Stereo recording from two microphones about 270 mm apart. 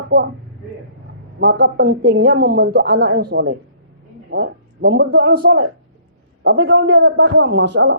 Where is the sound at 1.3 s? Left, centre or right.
Right.